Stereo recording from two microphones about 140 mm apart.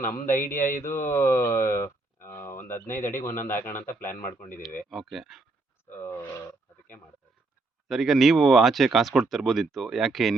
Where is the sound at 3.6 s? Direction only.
15° left (ahead or behind).